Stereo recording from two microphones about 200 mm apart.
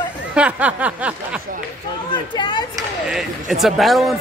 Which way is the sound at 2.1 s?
20° left (ahead or behind).